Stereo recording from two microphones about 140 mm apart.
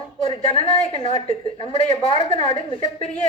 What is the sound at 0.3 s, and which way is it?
A woman's voice, 45° left (ahead or behind).